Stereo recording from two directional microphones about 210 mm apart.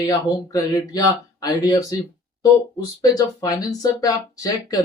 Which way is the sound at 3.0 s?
15° left (ahead or behind).